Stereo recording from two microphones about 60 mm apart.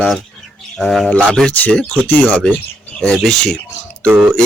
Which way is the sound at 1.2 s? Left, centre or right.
Centre.